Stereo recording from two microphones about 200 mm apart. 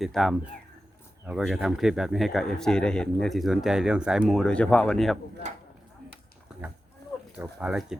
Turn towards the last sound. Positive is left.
turn(degrees=-5)  # may be behind; listen again after turning